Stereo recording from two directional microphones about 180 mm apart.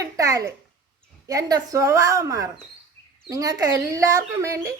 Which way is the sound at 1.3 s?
20° right (ahead or behind).